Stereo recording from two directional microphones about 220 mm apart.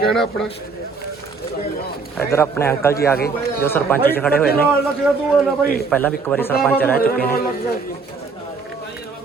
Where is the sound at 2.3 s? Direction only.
10° left (ahead or behind).